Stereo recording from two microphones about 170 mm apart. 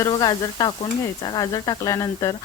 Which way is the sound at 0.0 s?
25° left (ahead or behind).